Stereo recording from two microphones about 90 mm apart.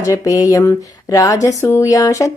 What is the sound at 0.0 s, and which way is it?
Speech, 40° left (ahead or behind).